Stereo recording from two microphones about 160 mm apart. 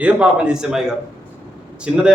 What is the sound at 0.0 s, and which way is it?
A man's voice, 5° right (ahead or behind).